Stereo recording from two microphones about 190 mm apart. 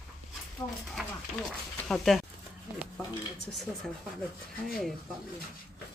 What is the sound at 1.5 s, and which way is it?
Speech, centre (ahead or behind).